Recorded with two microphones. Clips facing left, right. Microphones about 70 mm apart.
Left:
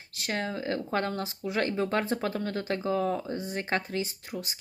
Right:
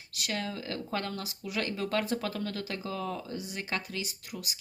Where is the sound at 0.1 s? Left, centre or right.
Left.